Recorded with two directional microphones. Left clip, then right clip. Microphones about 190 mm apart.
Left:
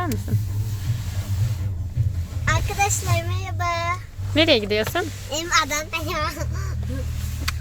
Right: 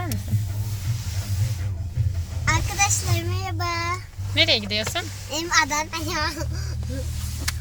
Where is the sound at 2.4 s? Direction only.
30° left (ahead or behind).